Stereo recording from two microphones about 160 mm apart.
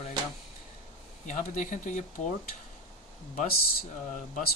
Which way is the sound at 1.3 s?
50° left (ahead or behind).